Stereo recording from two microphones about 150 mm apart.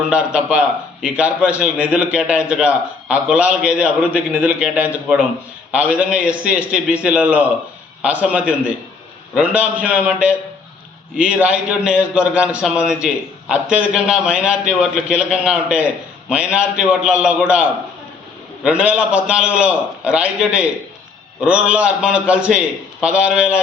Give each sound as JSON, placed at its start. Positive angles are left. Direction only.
{"t": 0.1, "sound": "a man's voice", "side_deg": -5}